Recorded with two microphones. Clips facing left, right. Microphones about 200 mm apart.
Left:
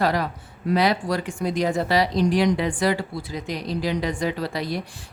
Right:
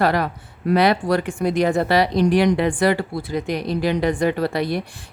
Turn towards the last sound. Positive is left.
turn(degrees=-60)  # may be behind; listen again after turning